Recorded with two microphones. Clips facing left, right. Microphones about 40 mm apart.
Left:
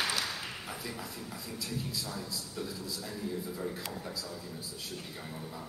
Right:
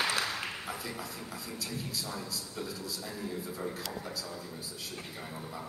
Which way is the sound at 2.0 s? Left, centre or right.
Centre.